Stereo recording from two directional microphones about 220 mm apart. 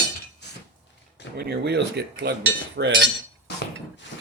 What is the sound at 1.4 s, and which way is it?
Speech, 45° right (ahead or behind).